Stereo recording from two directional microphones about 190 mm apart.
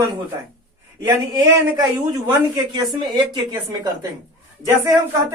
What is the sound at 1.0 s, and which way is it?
A woman's voice, 15° right (ahead or behind).